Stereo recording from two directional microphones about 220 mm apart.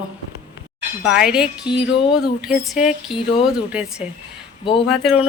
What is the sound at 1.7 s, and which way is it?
Music, 20° left (ahead or behind).